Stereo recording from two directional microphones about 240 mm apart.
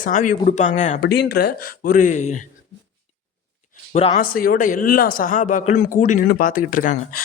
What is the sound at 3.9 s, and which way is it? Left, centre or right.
A man's voice, left.